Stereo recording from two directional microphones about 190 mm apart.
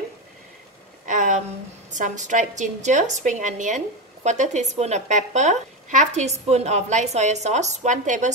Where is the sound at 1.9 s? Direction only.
40° right (ahead or behind).